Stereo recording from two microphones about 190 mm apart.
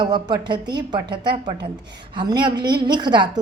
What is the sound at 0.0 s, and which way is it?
Speech, 20° right (ahead or behind).